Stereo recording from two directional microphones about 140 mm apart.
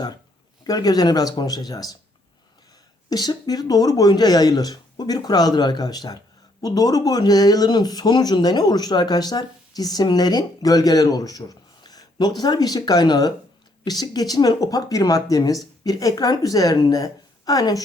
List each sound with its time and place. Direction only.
0.6 s speech: 30° left (ahead or behind)
3.1 s speech: 30° left (ahead or behind)